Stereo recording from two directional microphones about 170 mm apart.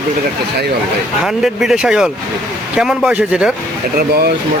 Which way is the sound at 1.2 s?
Centre (ahead or behind).